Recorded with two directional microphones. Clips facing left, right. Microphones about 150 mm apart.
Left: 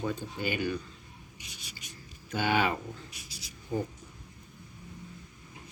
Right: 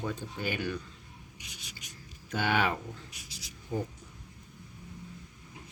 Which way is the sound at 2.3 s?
5° left (ahead or behind).